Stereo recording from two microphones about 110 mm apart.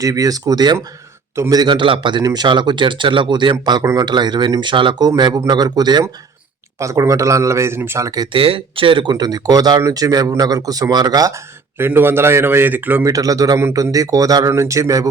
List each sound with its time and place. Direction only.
0.0 s speech: 35° right (ahead or behind)
6.7 s speech: 25° right (ahead or behind)
8.3 s speech: 55° right (ahead or behind); by 11.3 s 35° right (ahead or behind)
11.8 s speech: 20° right (ahead or behind)
13.1 s speech: 30° right (ahead or behind)